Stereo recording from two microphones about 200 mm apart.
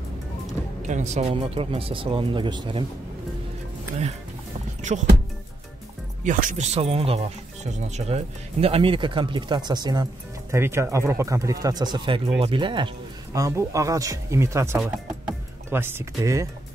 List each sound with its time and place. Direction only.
0.8 s speech: 35° right (ahead or behind)
6.2 s a man's voice: 40° right (ahead or behind); by 16.4 s 15° right (ahead or behind)